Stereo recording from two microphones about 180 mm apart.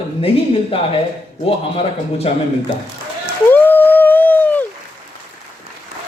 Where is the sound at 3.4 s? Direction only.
10° left (ahead or behind).